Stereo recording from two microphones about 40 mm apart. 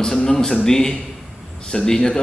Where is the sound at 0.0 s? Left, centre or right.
Centre.